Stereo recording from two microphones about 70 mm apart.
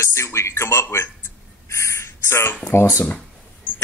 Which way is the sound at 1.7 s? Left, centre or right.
Left.